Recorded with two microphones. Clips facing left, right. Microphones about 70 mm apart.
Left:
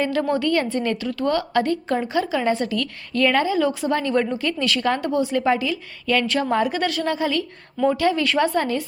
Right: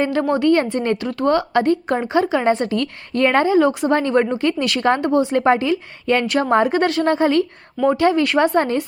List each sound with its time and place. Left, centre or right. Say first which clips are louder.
0.0 s a woman's voice: right 4 dB; right